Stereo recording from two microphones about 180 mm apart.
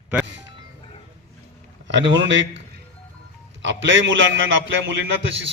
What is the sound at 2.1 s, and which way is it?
Speech, 90° right.